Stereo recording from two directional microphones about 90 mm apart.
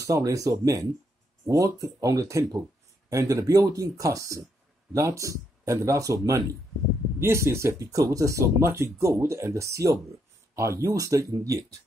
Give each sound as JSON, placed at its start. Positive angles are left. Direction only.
{"t": 0.0, "sound": "speech", "side_deg": -35}